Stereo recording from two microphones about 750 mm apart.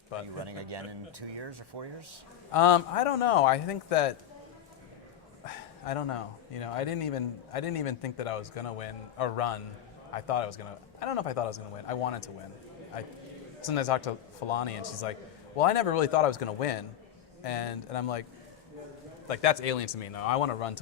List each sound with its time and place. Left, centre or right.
0.4 s speech: right
2.5 s a man's voice: left
5.5 s a man's voice: left
13.7 s a man's voice: left
19.3 s a man's voice: left